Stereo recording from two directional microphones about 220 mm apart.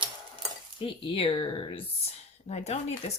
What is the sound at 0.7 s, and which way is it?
Speech, 25° left (ahead or behind).